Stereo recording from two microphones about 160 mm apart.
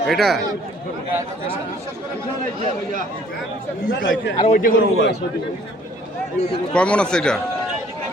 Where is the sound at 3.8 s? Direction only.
75° left (ahead or behind).